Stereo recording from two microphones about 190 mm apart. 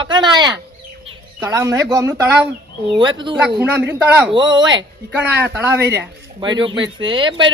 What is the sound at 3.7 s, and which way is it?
Speech, 10° right (ahead or behind).